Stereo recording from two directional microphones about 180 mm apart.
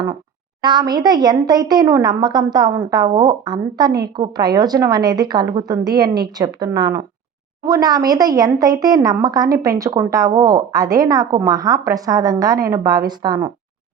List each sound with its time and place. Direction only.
0.6 s a woman's voice: 25° right (ahead or behind)